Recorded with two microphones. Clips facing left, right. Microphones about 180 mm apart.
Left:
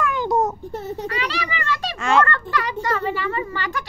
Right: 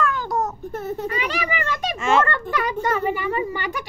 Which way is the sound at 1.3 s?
15° right (ahead or behind).